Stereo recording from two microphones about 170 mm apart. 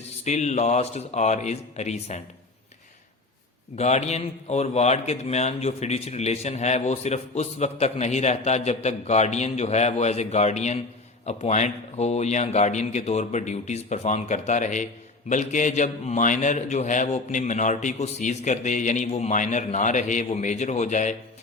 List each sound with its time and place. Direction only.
0.3 s a man's voice: 40° left (ahead or behind)
3.8 s a man's voice: 40° left (ahead or behind)